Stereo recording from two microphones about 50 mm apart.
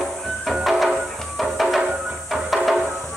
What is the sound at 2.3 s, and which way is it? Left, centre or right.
Music, centre.